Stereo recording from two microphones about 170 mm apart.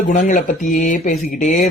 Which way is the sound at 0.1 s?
45° left (ahead or behind).